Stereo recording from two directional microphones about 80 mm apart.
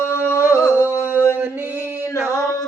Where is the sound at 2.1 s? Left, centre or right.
Left.